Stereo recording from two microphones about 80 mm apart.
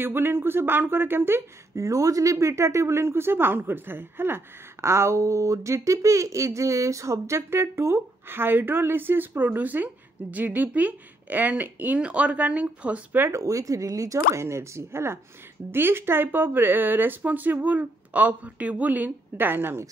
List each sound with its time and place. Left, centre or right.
0.0 s speech: right
1.8 s speech: right; by 13.2 s centre
13.2 s speech: right